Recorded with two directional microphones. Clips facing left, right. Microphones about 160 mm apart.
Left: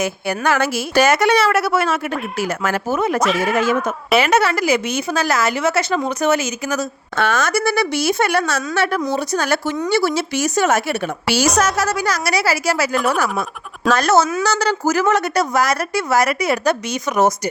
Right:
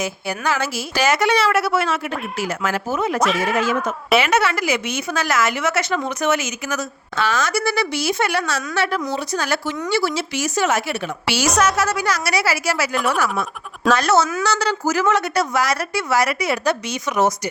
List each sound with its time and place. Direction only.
0.0 s a woman's voice: 60° left (ahead or behind)
3.2 s speech: centre (ahead or behind)
4.2 s a woman's voice: 35° left (ahead or behind)
7.2 s a woman's voice: 55° left (ahead or behind)